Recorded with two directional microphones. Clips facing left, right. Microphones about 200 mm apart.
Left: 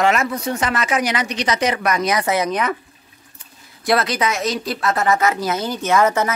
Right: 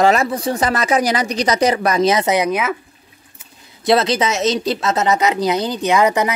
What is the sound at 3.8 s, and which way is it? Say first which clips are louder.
Speech: right 4 dB; 25° right (ahead or behind).